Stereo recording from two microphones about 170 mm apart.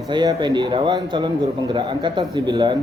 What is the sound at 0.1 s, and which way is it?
A man's voice, 25° right (ahead or behind).